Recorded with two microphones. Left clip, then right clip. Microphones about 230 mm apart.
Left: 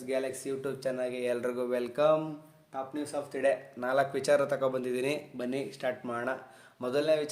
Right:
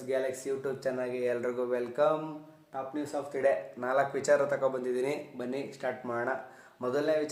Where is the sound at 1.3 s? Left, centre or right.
Left.